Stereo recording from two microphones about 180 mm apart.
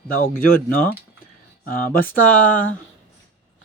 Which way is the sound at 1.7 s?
50° left (ahead or behind).